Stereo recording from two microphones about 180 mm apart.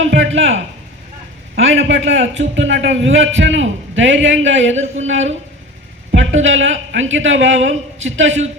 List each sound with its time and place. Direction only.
0.0 s a man's voice: 90° right